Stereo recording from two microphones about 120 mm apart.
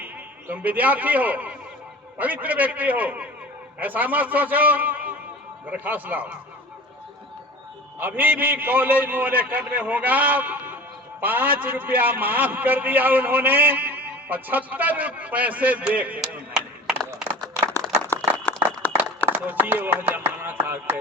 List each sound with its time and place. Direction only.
0.0 s a man's voice: 15° right (ahead or behind)
7.9 s a man's voice: 15° right (ahead or behind)
18.1 s run: 15° left (ahead or behind)
18.5 s a sound: 15° left (ahead or behind)
19.3 s speech: 15° right (ahead or behind)